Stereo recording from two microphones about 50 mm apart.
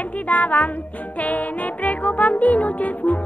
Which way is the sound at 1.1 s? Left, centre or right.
Left.